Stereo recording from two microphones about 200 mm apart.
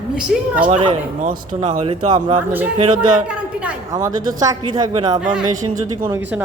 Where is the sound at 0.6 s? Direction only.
25° right (ahead or behind).